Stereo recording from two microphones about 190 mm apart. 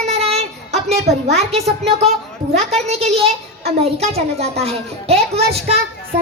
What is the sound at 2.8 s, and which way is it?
A woman's voice, 35° right (ahead or behind).